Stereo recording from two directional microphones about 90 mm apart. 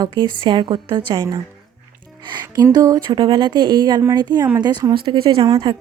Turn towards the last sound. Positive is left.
turn(degrees=-60)  # may be behind; listen again after turning